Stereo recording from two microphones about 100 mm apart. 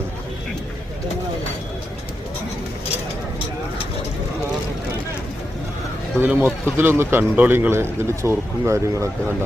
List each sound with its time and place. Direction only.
6.1 s a man's voice: 20° right (ahead or behind)